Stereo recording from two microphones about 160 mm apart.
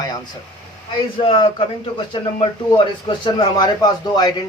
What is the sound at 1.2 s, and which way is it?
A man's voice, 30° left (ahead or behind).